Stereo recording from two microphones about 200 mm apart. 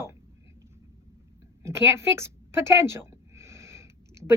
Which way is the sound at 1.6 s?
15° right (ahead or behind).